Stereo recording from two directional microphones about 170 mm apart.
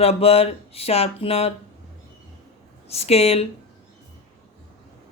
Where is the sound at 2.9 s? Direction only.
35° left (ahead or behind).